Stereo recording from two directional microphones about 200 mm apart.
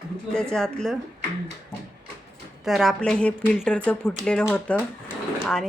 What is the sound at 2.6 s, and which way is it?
Speech, centre (ahead or behind).